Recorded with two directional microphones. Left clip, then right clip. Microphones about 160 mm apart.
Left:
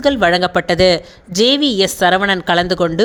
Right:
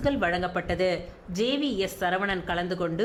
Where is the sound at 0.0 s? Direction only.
50° left (ahead or behind).